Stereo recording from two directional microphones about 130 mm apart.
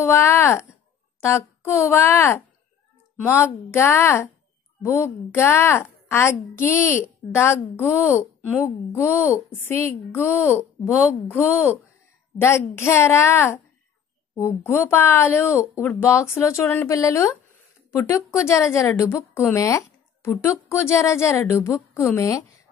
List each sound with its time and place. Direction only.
0.0 s a woman's voice: 20° left (ahead or behind)
12.4 s a woman's voice: 20° left (ahead or behind)